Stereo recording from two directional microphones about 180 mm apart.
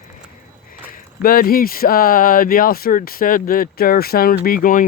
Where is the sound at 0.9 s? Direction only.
55° left (ahead or behind).